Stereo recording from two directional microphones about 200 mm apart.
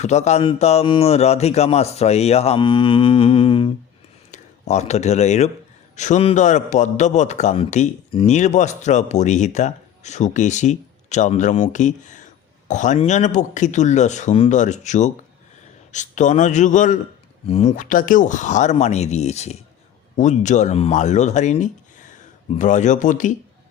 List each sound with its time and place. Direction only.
0.0 s a man's voice: 35° left (ahead or behind)